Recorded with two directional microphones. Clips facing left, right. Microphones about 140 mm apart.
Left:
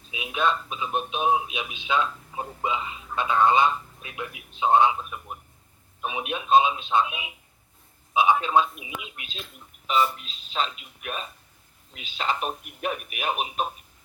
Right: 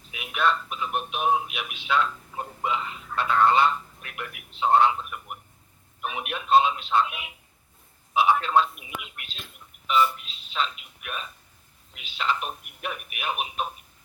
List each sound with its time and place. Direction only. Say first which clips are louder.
0.1 s a man's voice: even; 20° left (ahead or behind)